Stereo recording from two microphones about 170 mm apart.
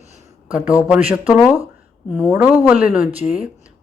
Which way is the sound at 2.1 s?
10° right (ahead or behind).